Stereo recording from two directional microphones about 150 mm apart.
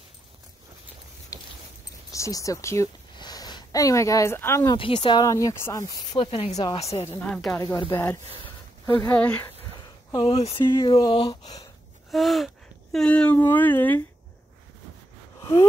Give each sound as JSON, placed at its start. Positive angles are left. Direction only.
{"t": 2.0, "sound": "speech", "side_deg": 20}
{"t": 4.7, "sound": "speech", "side_deg": 35}
{"t": 6.1, "sound": "speech", "side_deg": 40}
{"t": 7.1, "sound": "speech", "side_deg": 10}
{"t": 7.5, "sound": "speech", "side_deg": 20}
{"t": 8.8, "sound": "speech", "side_deg": 15}
{"t": 9.8, "sound": "a sound", "side_deg": 35}
{"t": 10.8, "sound": "speech", "side_deg": 30}
{"t": 12.1, "sound": "gasp", "side_deg": 0}
{"t": 12.9, "sound": "speech", "side_deg": 5}